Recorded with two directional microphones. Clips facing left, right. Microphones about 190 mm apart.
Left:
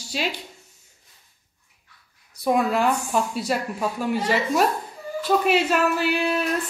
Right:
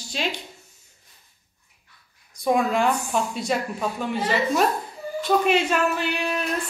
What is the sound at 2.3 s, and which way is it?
Speech, 5° left (ahead or behind).